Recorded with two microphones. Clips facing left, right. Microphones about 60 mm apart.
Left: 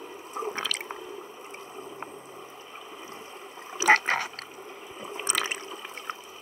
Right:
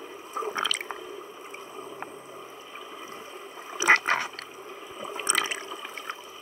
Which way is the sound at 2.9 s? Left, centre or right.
Right.